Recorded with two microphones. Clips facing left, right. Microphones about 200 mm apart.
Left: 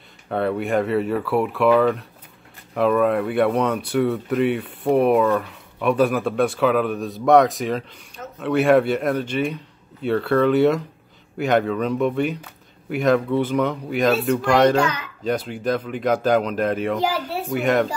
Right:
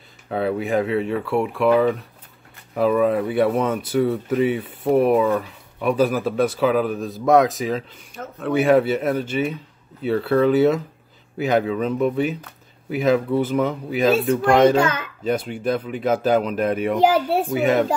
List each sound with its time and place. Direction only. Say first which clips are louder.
0.3 s speech: even; centre (ahead or behind)
14.8 s a child's voice: right 1 dB; 50° right (ahead or behind)
15.2 s speech: right 1 dB; 5° right (ahead or behind)